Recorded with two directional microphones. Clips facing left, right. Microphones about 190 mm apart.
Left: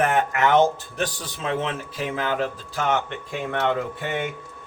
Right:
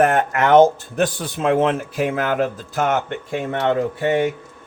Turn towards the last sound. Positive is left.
turn(degrees=-40)  # may be behind; listen again after turning